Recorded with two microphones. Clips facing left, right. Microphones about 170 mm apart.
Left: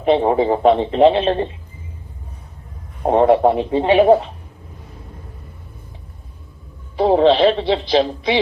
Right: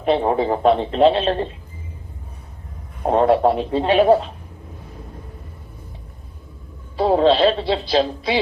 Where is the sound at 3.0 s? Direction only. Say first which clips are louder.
Left 2 dB; 15° left (ahead or behind).